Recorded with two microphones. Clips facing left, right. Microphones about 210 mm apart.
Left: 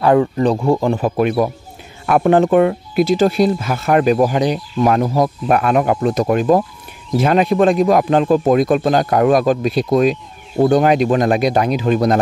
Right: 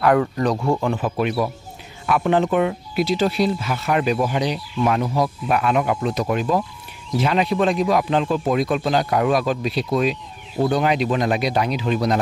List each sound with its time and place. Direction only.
0.0 s speech: 25° left (ahead or behind); by 12.2 s 50° left (ahead or behind)